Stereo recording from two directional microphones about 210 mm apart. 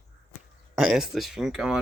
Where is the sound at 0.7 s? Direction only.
Centre (ahead or behind).